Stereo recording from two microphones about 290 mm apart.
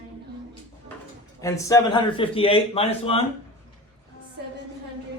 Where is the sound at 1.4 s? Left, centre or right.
Centre.